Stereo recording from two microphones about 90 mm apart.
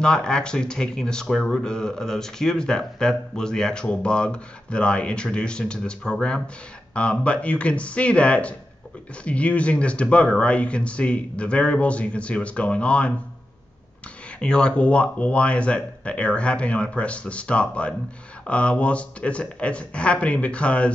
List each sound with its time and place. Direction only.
0.0 s speech: 10° left (ahead or behind)
14.4 s speech: 10° left (ahead or behind)